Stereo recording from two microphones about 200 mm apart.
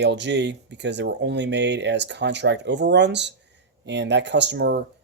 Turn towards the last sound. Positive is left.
turn(degrees=-60)  # may be behind; listen again after turning